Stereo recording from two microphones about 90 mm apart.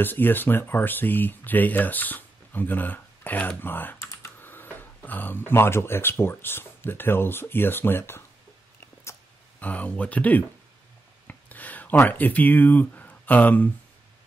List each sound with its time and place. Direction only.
0.0 s speech: 20° left (ahead or behind)
9.6 s speech: 15° left (ahead or behind)
11.2 s a sound: 20° left (ahead or behind)